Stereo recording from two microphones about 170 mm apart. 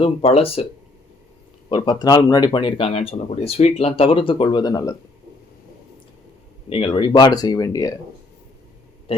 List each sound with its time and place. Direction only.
0.0 s speech: 35° left (ahead or behind)
1.7 s speech: 25° left (ahead or behind)
6.7 s speech: 30° left (ahead or behind)
9.1 s a sound: 35° left (ahead or behind)